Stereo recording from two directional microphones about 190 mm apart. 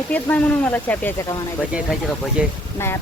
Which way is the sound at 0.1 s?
5° left (ahead or behind).